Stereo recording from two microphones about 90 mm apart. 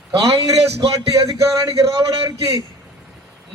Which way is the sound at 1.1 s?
40° right (ahead or behind).